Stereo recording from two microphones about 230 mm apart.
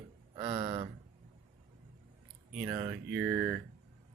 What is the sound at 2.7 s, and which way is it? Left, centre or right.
Speech, centre.